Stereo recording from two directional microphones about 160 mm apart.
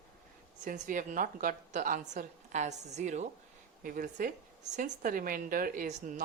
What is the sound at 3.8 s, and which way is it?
A woman's voice, 60° right (ahead or behind).